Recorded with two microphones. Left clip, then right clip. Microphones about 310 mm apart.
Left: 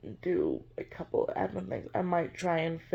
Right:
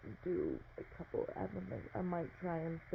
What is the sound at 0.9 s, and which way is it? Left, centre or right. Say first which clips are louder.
Speech: left 11 dB; centre.